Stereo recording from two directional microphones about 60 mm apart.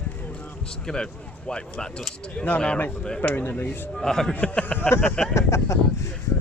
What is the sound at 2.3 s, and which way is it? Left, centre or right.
Speech, left.